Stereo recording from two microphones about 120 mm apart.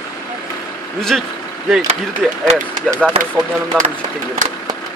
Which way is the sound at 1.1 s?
5° right (ahead or behind).